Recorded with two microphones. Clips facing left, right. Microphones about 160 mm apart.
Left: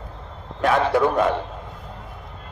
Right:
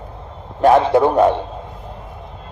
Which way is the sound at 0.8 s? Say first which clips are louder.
Right 5 dB; 30° right (ahead or behind).